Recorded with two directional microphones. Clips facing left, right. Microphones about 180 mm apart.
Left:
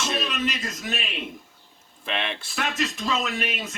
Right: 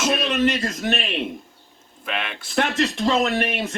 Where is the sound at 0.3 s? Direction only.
60° right (ahead or behind).